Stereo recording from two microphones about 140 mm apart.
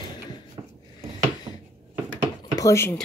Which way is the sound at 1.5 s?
45° right (ahead or behind).